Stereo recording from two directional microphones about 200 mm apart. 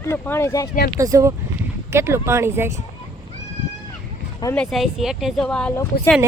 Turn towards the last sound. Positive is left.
turn(degrees=10)  # may be behind; listen again after turning